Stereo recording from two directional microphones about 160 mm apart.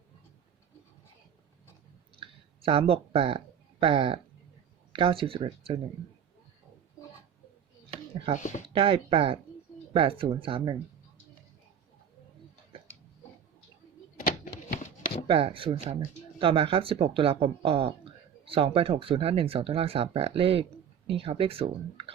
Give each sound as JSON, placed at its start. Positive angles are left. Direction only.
{"t": 2.1, "sound": "a sound", "side_deg": -35}
{"t": 4.9, "sound": "speech", "side_deg": -35}
{"t": 8.4, "sound": "speech", "side_deg": 50}
{"t": 8.7, "sound": "speech", "side_deg": -30}
{"t": 14.2, "sound": "a sound", "side_deg": 65}
{"t": 15.3, "sound": "speech", "side_deg": -35}